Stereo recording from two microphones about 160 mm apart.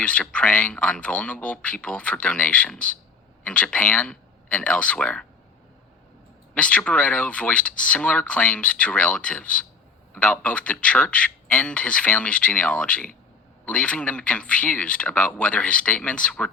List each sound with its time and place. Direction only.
0.0 s speech: 5° left (ahead or behind)
6.5 s speech: 10° left (ahead or behind)